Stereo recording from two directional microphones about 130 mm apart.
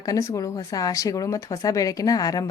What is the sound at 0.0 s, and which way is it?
Speech, 25° left (ahead or behind).